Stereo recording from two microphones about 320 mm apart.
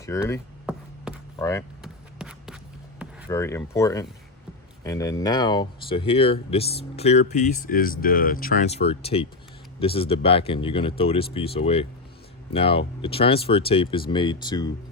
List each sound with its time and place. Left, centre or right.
0.0 s speech: centre
1.8 s shuffle: centre
3.2 s speech: centre